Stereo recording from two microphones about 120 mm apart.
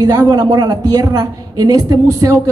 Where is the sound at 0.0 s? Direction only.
30° right (ahead or behind).